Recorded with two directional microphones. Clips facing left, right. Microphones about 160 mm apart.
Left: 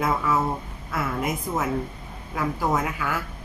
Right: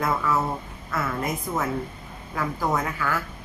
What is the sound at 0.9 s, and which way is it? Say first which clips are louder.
A woman's voice: left 1 dB; 10° left (ahead or behind).